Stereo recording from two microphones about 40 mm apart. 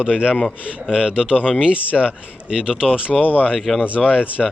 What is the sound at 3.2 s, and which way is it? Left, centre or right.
Speech, left.